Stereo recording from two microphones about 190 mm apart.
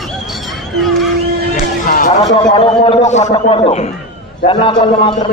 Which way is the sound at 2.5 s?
30° left (ahead or behind).